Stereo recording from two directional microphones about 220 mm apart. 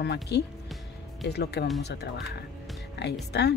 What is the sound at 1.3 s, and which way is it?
Speech, 50° left (ahead or behind).